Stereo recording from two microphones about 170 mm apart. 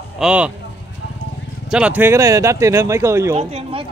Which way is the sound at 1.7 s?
10° right (ahead or behind).